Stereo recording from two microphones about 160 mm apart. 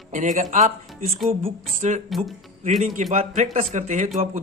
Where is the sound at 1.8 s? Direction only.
45° right (ahead or behind).